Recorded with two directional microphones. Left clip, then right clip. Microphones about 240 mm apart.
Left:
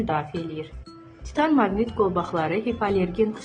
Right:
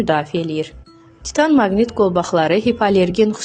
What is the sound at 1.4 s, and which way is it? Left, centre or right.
A woman's voice, right.